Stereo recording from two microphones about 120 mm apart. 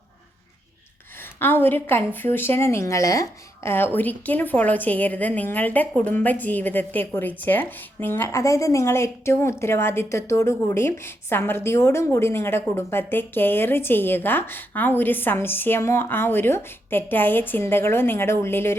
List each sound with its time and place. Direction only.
1.4 s a woman's voice: 15° left (ahead or behind)